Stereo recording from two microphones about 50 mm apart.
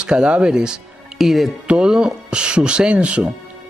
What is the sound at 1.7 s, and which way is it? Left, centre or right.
Speech, centre.